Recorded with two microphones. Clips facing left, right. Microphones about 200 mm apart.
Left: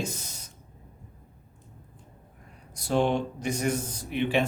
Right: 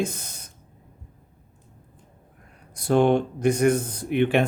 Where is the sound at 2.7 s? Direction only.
55° right (ahead or behind).